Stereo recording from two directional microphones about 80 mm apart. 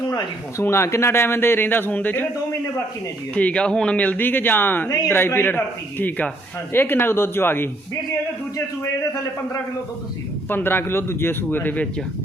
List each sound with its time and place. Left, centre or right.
0.6 s speech: left
3.3 s speech: centre
8.5 s a man's voice: left
10.5 s speech: left